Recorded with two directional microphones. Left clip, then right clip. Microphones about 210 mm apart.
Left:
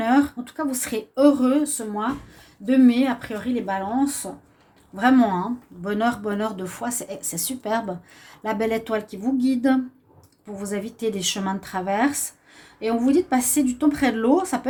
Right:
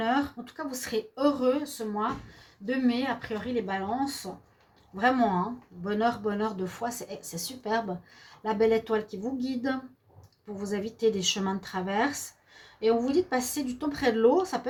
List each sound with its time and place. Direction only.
0.0 s speech: 40° left (ahead or behind)
4.9 s speech: 40° left (ahead or behind)